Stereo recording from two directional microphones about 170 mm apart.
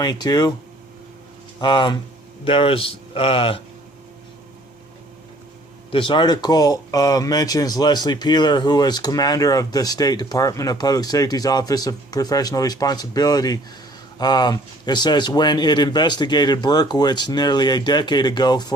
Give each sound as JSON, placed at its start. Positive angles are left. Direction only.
{"t": 0.0, "sound": "speech", "side_deg": 25}
{"t": 1.6, "sound": "speech", "side_deg": 25}
{"t": 5.9, "sound": "speech", "side_deg": 30}